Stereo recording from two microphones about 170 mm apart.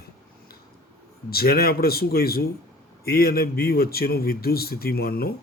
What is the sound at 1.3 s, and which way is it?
A man's voice, 65° left (ahead or behind).